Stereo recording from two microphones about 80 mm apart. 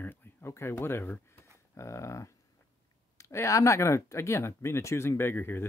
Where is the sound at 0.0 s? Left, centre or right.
Left.